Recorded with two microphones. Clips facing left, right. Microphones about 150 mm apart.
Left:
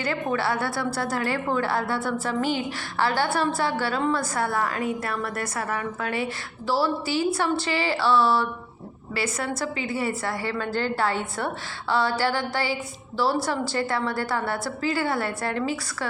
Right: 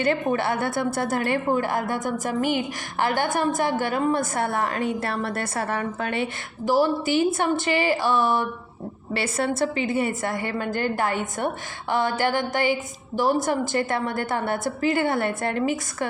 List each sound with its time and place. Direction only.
0.0 s a woman's voice: 20° right (ahead or behind)